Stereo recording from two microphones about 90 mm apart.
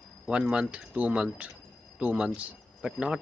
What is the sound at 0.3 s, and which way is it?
A man's voice, 10° right (ahead or behind).